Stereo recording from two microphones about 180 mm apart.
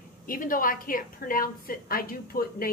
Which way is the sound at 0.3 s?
50° left (ahead or behind).